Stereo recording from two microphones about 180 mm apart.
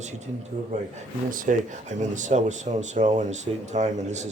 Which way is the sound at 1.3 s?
45° right (ahead or behind).